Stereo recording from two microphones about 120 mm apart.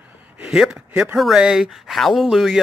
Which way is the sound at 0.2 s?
5° right (ahead or behind).